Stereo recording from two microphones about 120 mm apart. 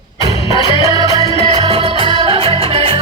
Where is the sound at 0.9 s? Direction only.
35° right (ahead or behind).